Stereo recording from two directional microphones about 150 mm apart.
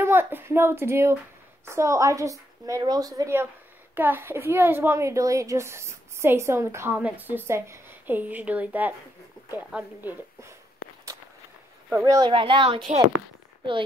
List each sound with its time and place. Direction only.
0.0 s a woman's voice: 15° right (ahead or behind)
11.9 s a woman's voice: 20° right (ahead or behind)
12.3 s speech: 35° right (ahead or behind)